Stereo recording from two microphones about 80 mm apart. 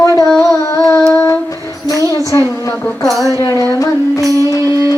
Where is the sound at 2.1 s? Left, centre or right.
Left.